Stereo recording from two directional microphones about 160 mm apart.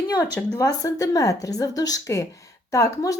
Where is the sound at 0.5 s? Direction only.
20° left (ahead or behind).